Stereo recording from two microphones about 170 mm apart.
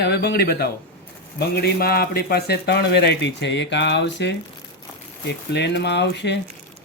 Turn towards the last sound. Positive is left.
turn(degrees=90)